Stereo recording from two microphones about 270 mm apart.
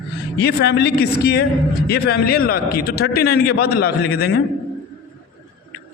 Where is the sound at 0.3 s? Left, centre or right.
Left.